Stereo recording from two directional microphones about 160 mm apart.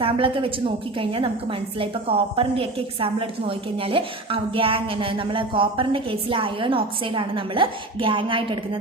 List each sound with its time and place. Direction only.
0.0 s a woman's voice: 35° right (ahead or behind)